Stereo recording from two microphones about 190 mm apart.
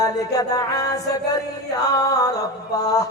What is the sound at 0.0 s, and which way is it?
Mantra, 20° left (ahead or behind).